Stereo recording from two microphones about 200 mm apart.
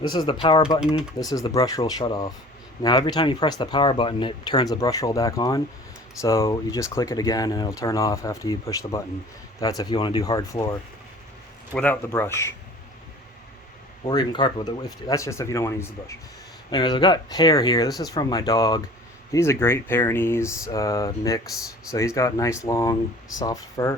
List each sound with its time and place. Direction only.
0.0 s speech: 20° left (ahead or behind)
14.0 s speech: 20° left (ahead or behind)